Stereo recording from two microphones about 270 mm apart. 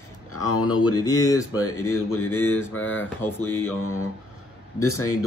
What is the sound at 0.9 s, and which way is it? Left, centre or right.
Speech, centre.